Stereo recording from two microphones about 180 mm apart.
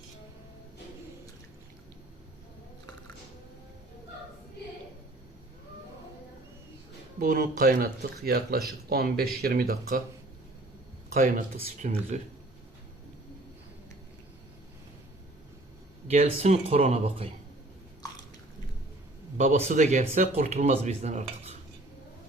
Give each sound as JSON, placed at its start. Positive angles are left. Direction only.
{"t": 7.2, "sound": "speech", "side_deg": -50}
{"t": 11.1, "sound": "speech", "side_deg": -40}
{"t": 16.0, "sound": "speech", "side_deg": -35}
{"t": 19.4, "sound": "speech", "side_deg": -40}